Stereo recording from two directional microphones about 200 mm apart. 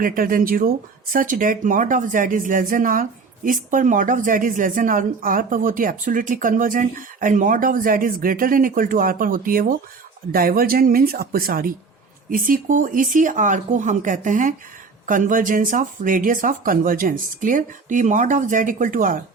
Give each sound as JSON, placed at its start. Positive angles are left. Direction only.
{"t": 0.0, "sound": "speech", "side_deg": -45}